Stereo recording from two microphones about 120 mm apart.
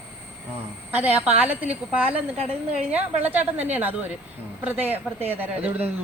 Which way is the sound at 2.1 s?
60° right (ahead or behind).